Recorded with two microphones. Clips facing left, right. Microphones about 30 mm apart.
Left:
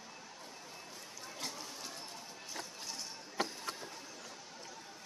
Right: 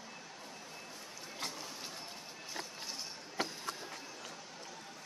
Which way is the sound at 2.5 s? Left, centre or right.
Right.